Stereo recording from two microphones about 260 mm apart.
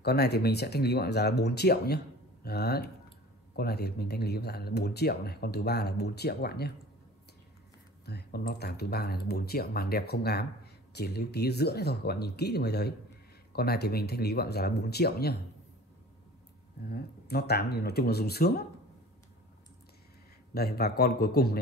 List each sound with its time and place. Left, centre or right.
0.0 s speech: left
8.0 s speech: left
16.8 s speech: left
20.5 s speech: left